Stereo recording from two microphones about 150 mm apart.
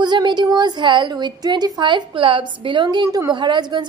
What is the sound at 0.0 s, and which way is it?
A woman's voice, 30° right (ahead or behind).